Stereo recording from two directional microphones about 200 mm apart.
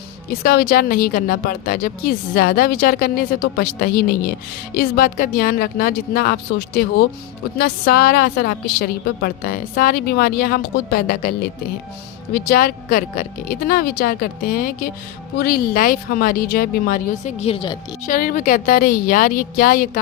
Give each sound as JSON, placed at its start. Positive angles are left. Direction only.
{"t": 0.4, "sound": "a woman's voice", "side_deg": 50}
{"t": 17.4, "sound": "speech", "side_deg": 25}
{"t": 18.0, "sound": "a woman's voice", "side_deg": 45}